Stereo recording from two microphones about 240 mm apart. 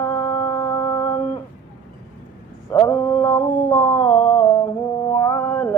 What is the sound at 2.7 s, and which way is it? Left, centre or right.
Mantra, centre.